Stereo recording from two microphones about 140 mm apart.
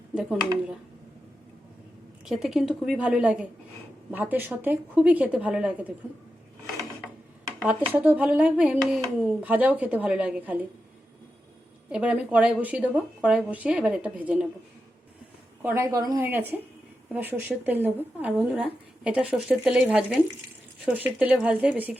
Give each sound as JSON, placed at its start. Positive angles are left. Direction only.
{"t": 0.1, "sound": "speech", "side_deg": -5}
{"t": 2.2, "sound": "a woman's voice", "side_deg": 0}
{"t": 7.9, "sound": "speech", "side_deg": -10}
{"t": 11.9, "sound": "speech", "side_deg": -10}
{"t": 15.6, "sound": "a woman's voice", "side_deg": -20}
{"t": 16.2, "sound": "speech", "side_deg": -15}